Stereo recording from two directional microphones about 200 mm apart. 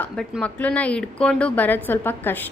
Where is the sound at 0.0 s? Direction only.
5° left (ahead or behind).